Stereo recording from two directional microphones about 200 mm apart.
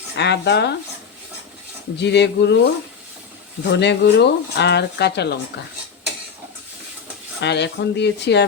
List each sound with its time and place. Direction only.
0.2 s speech: 60° left (ahead or behind)
2.0 s speech: 60° left (ahead or behind)
3.6 s speech: 60° left (ahead or behind)
7.4 s speech: 60° left (ahead or behind)